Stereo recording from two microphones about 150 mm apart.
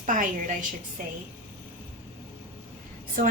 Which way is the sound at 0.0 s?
60° right (ahead or behind).